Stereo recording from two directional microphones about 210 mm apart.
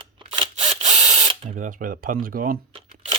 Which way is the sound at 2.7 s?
25° right (ahead or behind).